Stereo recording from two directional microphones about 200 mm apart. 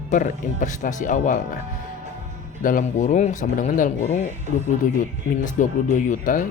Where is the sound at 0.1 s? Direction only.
40° left (ahead or behind).